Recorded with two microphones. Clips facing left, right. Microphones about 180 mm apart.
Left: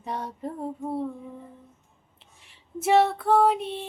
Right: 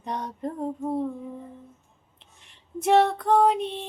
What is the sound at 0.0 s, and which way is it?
Child singing, 5° left (ahead or behind).